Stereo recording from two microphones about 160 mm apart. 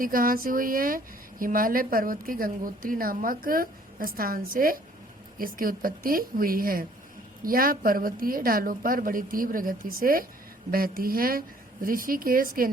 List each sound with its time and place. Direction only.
0.0 s speech: 60° right (ahead or behind)